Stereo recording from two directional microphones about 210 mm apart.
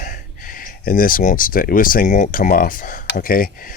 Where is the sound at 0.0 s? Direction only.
40° left (ahead or behind).